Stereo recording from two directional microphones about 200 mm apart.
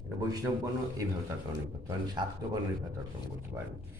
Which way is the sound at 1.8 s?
20° right (ahead or behind).